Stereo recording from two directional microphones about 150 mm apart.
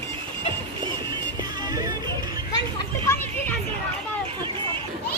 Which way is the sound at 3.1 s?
15° left (ahead or behind).